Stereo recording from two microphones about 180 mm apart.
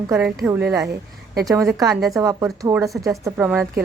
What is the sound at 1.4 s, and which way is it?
Speech, 20° right (ahead or behind).